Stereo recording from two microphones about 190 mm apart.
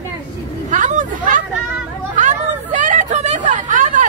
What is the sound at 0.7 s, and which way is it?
Hubbub, 40° right (ahead or behind).